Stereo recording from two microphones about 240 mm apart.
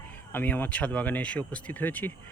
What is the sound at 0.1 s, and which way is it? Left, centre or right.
Speech, centre.